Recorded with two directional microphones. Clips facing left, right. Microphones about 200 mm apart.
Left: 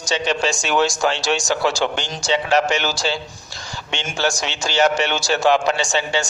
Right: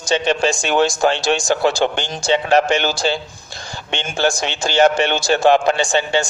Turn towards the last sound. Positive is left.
turn(degrees=-55)  # may be behind; listen again after turning